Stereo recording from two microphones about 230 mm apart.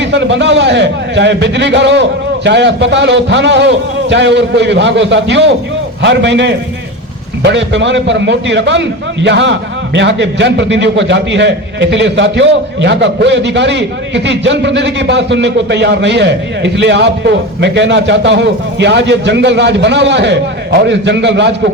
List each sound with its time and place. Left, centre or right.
0.0 s a man's voice: right